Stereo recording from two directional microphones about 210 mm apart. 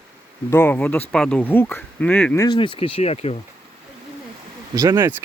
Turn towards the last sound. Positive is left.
turn(degrees=-15)  # may be behind; listen again after turning